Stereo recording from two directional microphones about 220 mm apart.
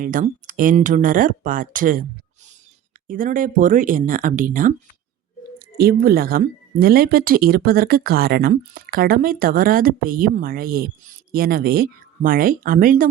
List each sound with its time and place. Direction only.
0.0 s speech: 40° right (ahead or behind)
3.1 s speech: 40° right (ahead or behind)
5.7 s speech: 45° right (ahead or behind)